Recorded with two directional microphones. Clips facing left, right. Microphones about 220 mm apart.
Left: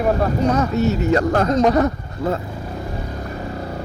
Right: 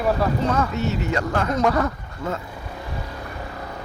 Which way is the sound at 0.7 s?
40° left (ahead or behind).